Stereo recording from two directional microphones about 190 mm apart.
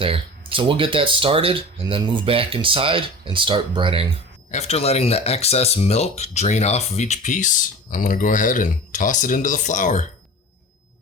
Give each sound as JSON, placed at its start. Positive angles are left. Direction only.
{"t": 0.0, "sound": "speech", "side_deg": -30}
{"t": 4.5, "sound": "speech", "side_deg": 35}